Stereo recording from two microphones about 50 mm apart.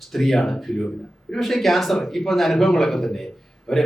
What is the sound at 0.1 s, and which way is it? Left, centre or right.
A man's voice, centre.